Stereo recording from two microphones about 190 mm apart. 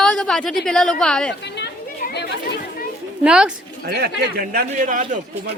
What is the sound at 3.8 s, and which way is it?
A man's voice, 55° right (ahead or behind).